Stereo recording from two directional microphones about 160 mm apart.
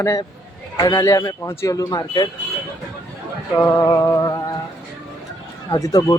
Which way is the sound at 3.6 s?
20° left (ahead or behind).